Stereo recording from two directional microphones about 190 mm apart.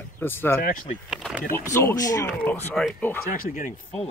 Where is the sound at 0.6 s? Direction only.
45° left (ahead or behind).